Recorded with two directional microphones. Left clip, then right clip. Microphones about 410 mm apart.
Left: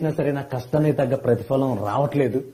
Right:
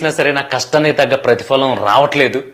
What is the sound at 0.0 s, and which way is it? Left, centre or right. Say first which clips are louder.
Speech: right 10 dB; centre.